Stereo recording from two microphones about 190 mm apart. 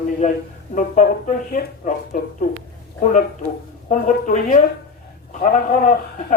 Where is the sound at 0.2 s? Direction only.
40° left (ahead or behind).